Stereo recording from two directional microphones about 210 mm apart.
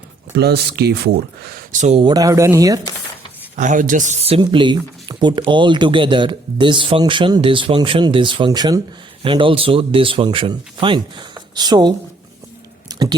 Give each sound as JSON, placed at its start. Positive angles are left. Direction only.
{"t": 0.3, "sound": "speech", "side_deg": -50}
{"t": 1.8, "sound": "speech", "side_deg": -30}
{"t": 3.5, "sound": "speech", "side_deg": -35}
{"t": 12.9, "sound": "a sound", "side_deg": -20}